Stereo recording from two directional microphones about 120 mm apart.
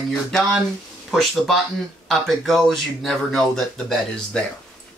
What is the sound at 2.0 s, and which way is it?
Speech, centre (ahead or behind).